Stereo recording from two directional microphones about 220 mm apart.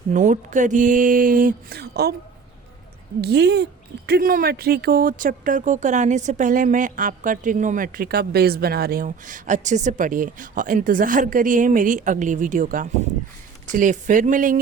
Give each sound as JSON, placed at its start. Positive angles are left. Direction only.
{"t": 0.1, "sound": "speech", "side_deg": -35}
{"t": 3.2, "sound": "speech", "side_deg": -50}